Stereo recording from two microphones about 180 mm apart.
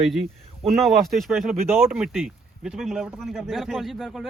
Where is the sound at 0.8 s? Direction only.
Centre (ahead or behind).